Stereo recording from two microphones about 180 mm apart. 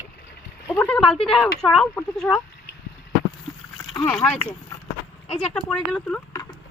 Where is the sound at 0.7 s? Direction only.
10° left (ahead or behind).